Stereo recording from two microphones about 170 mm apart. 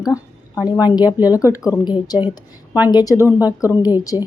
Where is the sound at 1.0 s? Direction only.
10° right (ahead or behind).